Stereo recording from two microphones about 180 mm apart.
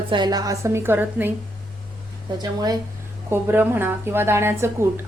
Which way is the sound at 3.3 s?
10° right (ahead or behind).